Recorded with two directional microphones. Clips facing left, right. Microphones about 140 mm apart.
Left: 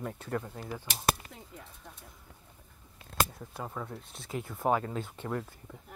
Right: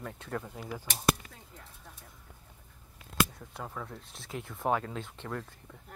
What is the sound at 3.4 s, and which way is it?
Speech, 5° left (ahead or behind).